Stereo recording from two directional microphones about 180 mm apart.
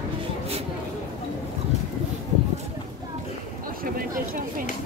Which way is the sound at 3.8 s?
50° right (ahead or behind).